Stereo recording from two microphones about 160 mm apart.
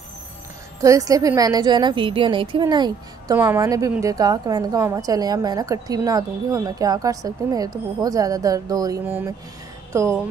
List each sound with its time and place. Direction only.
0.7 s a woman's voice: 20° right (ahead or behind)
3.3 s a woman's voice: 15° right (ahead or behind)
9.0 s speech: 10° right (ahead or behind)